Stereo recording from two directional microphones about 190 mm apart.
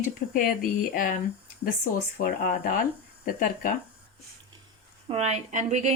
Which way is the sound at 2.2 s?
50° left (ahead or behind).